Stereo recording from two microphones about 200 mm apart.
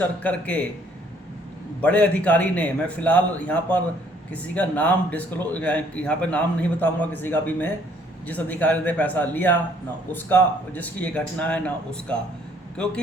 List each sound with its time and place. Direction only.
0.0 s a man's voice: 5° left (ahead or behind)
1.8 s a man's voice: 5° left (ahead or behind)